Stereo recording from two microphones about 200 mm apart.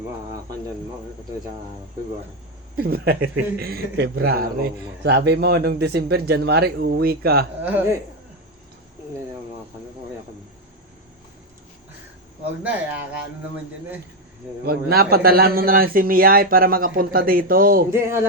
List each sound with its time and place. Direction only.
2.7 s a man's voice: 50° right (ahead or behind)
7.6 s speech: 10° right (ahead or behind)
14.6 s a man's voice: 50° right (ahead or behind)
17.9 s speech: 10° right (ahead or behind)